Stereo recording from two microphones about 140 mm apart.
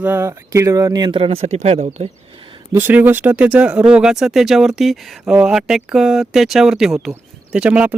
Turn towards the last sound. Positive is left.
turn(degrees=-10)  # may be behind; listen again after turning